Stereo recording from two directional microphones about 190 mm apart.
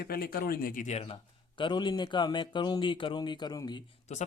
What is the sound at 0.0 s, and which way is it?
A man's voice, 50° left (ahead or behind).